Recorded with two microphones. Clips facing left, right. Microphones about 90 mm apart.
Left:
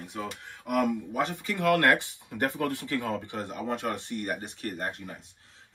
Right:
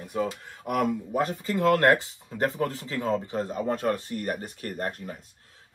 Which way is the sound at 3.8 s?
50° right (ahead or behind).